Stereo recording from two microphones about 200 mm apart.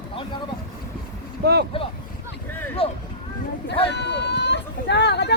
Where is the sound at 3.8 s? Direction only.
60° left (ahead or behind).